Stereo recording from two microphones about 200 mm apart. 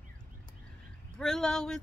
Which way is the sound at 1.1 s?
5° left (ahead or behind).